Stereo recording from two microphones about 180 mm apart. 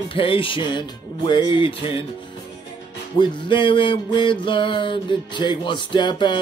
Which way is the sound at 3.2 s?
25° left (ahead or behind).